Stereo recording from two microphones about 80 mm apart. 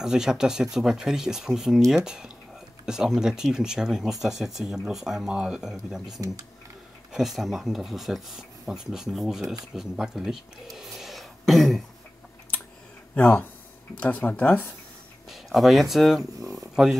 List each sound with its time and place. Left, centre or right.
0.0 s speech: centre
7.1 s speech: centre
13.1 s speech: centre
15.2 s speech: centre